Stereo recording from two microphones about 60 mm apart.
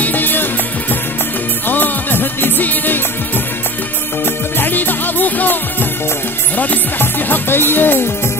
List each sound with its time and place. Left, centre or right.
0.0 s music: left
1.7 s music: left
4.6 s music: left